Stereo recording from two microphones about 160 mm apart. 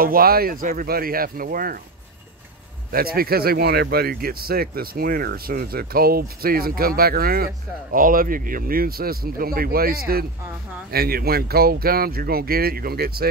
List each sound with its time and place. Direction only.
0.0 s speech: 65° right (ahead or behind)
2.9 s speech: 70° right (ahead or behind)